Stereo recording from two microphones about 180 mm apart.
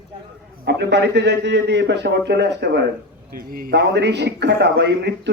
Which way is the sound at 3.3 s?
55° right (ahead or behind).